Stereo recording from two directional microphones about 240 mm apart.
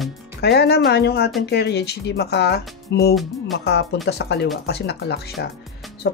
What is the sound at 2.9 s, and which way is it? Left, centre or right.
Music, left.